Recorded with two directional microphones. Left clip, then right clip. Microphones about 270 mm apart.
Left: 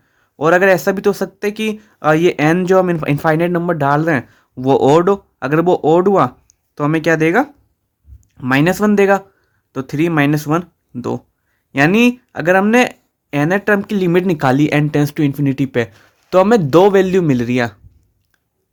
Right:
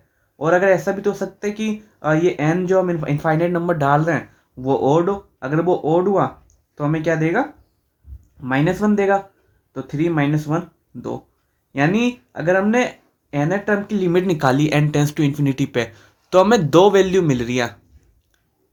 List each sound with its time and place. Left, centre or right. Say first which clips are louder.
0.3 s speech: left 4 dB; left